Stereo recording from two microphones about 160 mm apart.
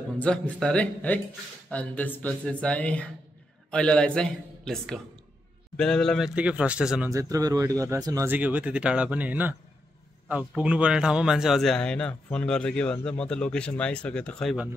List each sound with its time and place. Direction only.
0.2 s a man's voice: 5° left (ahead or behind)
7.1 s a man's voice: 20° right (ahead or behind); by 14.6 s 5° left (ahead or behind)